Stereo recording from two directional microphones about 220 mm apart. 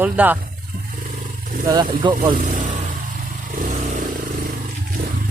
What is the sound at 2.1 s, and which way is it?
Vehicle, 40° right (ahead or behind).